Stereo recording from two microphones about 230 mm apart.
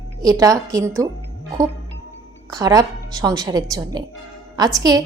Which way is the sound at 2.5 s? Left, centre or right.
Centre.